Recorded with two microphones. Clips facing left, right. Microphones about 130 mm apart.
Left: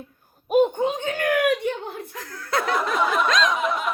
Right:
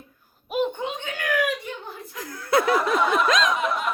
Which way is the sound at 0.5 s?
40° left (ahead or behind).